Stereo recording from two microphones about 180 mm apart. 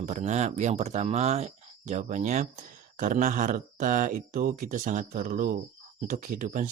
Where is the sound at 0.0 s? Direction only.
40° right (ahead or behind).